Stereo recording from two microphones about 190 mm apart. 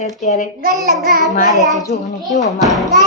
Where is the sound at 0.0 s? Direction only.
35° left (ahead or behind).